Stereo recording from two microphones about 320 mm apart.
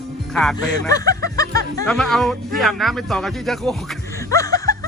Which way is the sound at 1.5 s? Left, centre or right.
Right.